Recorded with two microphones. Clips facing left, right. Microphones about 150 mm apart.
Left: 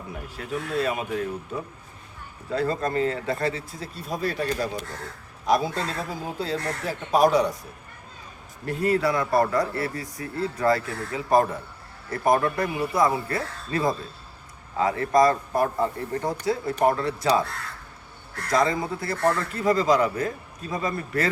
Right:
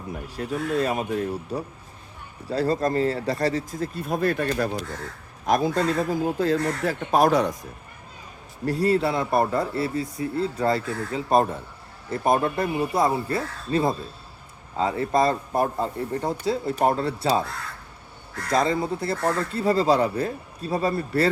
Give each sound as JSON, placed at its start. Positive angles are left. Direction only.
{"t": 0.3, "sound": "speech", "side_deg": -40}
{"t": 2.5, "sound": "speech", "side_deg": -35}
{"t": 8.6, "sound": "speech", "side_deg": -35}
{"t": 18.5, "sound": "speech", "side_deg": -25}